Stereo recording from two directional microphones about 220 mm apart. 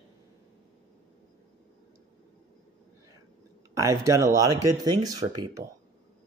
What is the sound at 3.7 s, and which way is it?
Speech, 15° right (ahead or behind).